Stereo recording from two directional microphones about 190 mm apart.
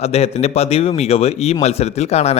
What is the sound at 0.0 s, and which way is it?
Speech, 35° left (ahead or behind).